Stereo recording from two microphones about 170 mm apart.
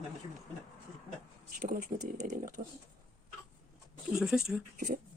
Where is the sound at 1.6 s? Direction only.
55° right (ahead or behind).